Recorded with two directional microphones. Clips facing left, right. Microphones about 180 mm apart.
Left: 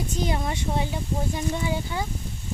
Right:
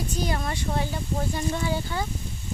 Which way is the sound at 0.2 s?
20° left (ahead or behind).